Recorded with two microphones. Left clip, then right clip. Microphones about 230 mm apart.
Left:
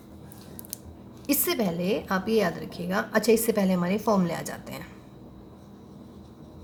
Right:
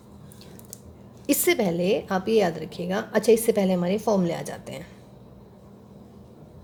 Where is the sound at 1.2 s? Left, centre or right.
Right.